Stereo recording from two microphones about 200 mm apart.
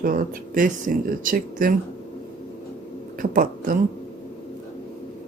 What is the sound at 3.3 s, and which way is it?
Speech, 45° right (ahead or behind).